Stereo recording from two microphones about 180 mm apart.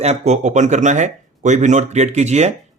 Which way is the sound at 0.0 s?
40° right (ahead or behind).